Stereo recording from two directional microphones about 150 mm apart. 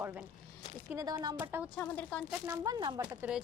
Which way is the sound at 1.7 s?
10° left (ahead or behind).